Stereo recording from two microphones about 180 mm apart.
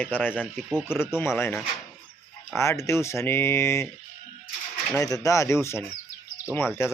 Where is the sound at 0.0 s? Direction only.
10° left (ahead or behind).